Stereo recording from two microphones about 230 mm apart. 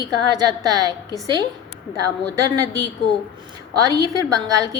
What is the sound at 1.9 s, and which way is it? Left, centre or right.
Speech, centre.